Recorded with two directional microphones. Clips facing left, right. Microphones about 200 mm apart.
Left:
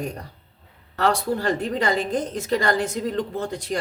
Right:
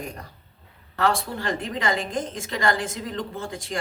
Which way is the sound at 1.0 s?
40° left (ahead or behind).